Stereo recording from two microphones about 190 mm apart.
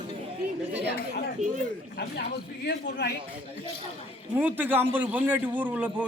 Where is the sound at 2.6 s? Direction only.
60° left (ahead or behind).